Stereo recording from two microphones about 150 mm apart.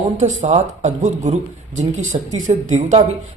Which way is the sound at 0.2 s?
50° right (ahead or behind).